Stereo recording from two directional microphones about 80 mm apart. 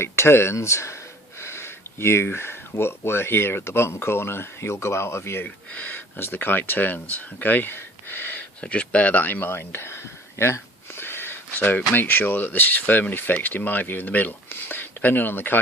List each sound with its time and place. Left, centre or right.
0.0 s speech: left